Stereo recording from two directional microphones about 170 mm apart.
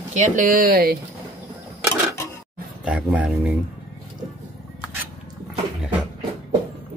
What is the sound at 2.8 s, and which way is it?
Speech, 5° right (ahead or behind).